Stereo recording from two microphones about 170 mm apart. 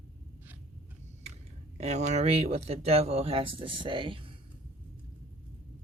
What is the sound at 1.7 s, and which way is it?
Speech, 40° right (ahead or behind).